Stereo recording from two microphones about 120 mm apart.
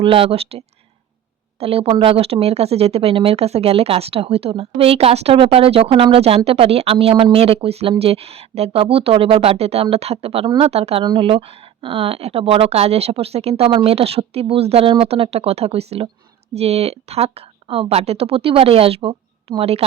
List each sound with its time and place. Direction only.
0.0 s speech: 50° right (ahead or behind)
11.0 s speech: 45° right (ahead or behind)